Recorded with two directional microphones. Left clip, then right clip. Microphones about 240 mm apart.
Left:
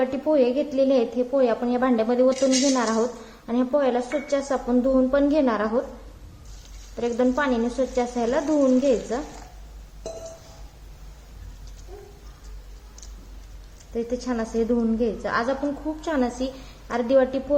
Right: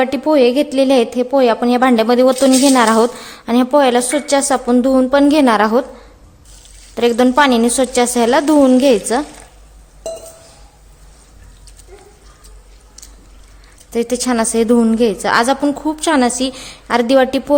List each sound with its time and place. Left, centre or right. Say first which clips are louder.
0.0 s a woman's voice: right 9 dB; right
6.9 s a woman's voice: right 11 dB; right
13.9 s a woman's voice: right 11 dB; right